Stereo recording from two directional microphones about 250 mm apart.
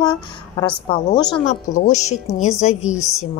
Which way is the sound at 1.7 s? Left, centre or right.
Left.